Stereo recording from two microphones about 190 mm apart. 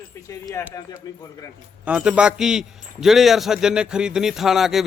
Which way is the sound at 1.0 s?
20° left (ahead or behind).